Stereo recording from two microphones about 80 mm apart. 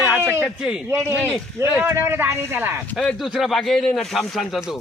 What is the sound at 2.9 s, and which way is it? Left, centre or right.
Speech, centre.